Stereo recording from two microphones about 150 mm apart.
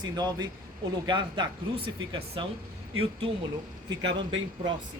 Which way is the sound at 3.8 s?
30° right (ahead or behind).